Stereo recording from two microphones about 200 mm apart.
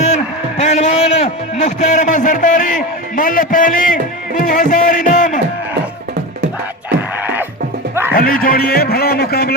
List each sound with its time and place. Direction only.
0.0 s a sound: 35° left (ahead or behind)
4.4 s speech: 40° left (ahead or behind)
7.2 s music: 10° right (ahead or behind)
8.1 s a man's voice: 45° left (ahead or behind)